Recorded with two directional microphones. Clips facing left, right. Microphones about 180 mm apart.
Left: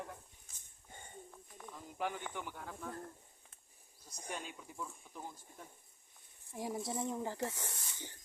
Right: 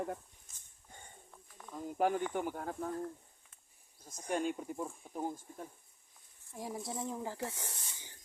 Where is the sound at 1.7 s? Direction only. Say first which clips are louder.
Right 9 dB; 45° right (ahead or behind).